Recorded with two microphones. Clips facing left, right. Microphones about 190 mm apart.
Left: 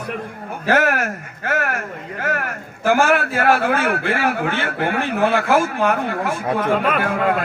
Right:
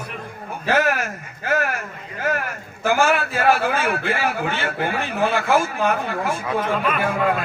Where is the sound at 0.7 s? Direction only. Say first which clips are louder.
Left 2 dB; 60° left (ahead or behind).